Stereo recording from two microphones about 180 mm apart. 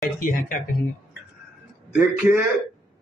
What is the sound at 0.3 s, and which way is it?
Speech, 50° left (ahead or behind).